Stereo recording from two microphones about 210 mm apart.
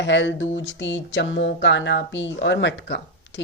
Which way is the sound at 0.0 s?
60° left (ahead or behind).